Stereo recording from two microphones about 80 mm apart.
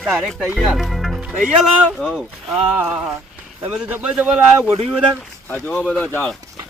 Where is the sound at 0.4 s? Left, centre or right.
Centre.